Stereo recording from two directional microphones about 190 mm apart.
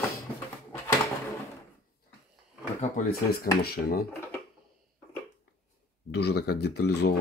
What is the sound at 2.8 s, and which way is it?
Speech, 45° left (ahead or behind).